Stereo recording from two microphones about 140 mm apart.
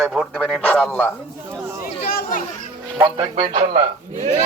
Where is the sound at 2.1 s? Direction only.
75° left (ahead or behind).